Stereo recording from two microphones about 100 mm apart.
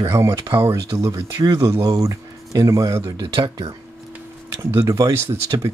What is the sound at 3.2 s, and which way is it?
Speech, 45° right (ahead or behind).